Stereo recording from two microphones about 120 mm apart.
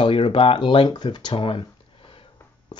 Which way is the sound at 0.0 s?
45° left (ahead or behind).